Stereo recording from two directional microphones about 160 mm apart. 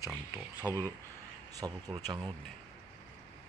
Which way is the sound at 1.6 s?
25° right (ahead or behind).